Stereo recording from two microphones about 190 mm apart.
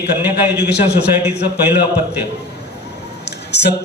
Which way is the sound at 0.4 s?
60° left (ahead or behind).